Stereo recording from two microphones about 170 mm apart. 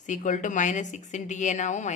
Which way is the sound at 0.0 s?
45° left (ahead or behind).